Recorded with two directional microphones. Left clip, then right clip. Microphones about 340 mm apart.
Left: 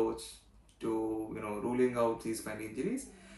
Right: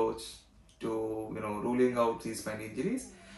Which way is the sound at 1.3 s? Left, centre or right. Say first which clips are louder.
Right 2 dB; centre.